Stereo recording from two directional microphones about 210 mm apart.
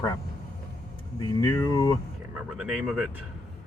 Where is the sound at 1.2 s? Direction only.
20° left (ahead or behind).